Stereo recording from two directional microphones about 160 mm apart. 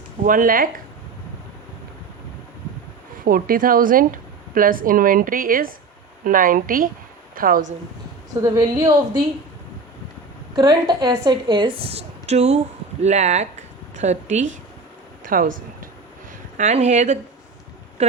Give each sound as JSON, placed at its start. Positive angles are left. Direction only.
{"t": 0.3, "sound": "speech", "side_deg": -60}
{"t": 3.2, "sound": "speech", "side_deg": -65}
{"t": 8.4, "sound": "a woman's voice", "side_deg": -25}
{"t": 10.5, "sound": "a woman's voice", "side_deg": -30}
{"t": 15.2, "sound": "a sound", "side_deg": -60}
{"t": 16.6, "sound": "speech", "side_deg": -45}